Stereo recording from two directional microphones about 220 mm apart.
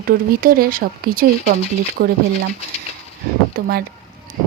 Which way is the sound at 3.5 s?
40° right (ahead or behind).